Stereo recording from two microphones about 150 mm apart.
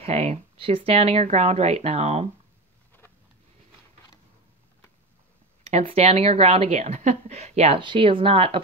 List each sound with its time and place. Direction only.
0.0 s speech: 45° right (ahead or behind)
5.6 s a woman's voice: 45° right (ahead or behind)